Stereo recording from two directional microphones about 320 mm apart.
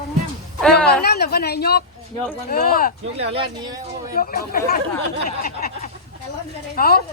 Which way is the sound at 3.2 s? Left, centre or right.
Centre.